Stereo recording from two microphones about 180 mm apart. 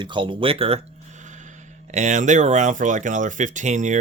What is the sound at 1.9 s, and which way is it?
Speech, 40° right (ahead or behind).